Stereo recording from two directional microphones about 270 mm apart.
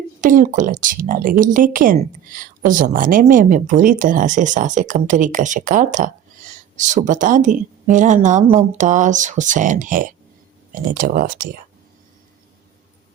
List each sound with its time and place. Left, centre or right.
0.2 s speech: right